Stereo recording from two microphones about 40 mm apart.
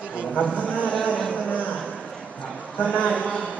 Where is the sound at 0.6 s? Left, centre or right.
Left.